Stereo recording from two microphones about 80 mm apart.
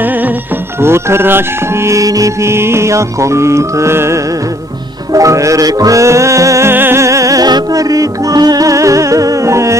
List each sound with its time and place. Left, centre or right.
0.7 s music: right
6.7 s music: right